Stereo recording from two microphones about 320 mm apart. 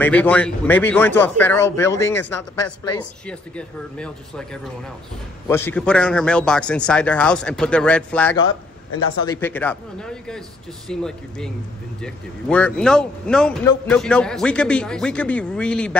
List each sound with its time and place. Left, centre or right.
0.0 s speech: centre
5.5 s speech: centre
8.4 s a man's voice: left
9.3 s speech: centre